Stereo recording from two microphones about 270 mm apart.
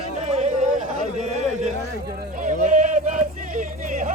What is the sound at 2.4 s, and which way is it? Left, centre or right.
Music, right.